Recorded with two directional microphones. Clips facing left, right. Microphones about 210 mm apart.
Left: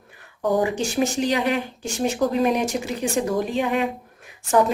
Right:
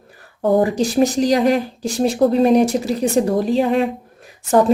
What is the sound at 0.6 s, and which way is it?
Speech, 35° right (ahead or behind).